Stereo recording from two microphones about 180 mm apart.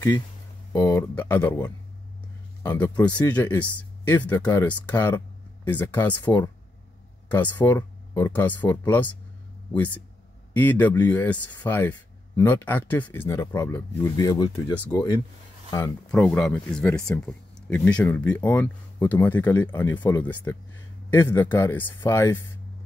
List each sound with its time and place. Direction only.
0.7 s speech: 15° left (ahead or behind)
3.2 s speech: 10° left (ahead or behind)
10.5 s speech: 10° left (ahead or behind)
16.1 s speech: 5° left (ahead or behind)